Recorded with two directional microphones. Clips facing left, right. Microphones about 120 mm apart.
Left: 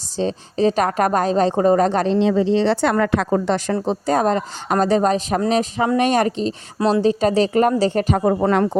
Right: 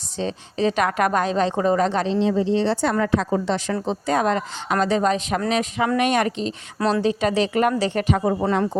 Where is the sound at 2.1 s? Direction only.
80° left.